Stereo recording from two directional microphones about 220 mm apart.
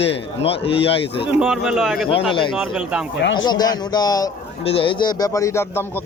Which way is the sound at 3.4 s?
20° left (ahead or behind).